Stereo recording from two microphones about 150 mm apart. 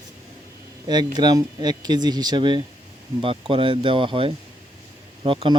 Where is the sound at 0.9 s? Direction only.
30° right (ahead or behind).